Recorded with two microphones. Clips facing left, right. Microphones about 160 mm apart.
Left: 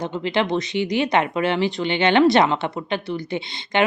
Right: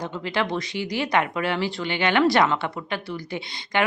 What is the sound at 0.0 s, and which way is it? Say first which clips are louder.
Speech: left 4 dB; 25° left (ahead or behind).